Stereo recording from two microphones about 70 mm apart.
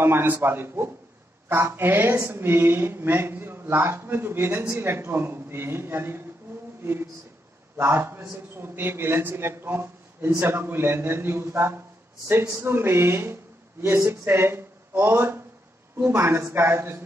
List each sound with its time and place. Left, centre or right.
0.0 s speech: right